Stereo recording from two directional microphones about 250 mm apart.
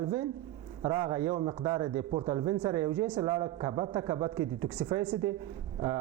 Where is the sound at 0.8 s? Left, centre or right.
Right.